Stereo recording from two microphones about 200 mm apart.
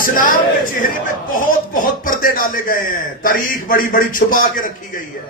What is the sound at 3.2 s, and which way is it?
Speech, 45° left (ahead or behind).